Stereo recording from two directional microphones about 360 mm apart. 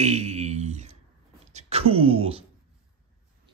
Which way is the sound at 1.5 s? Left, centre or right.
Centre.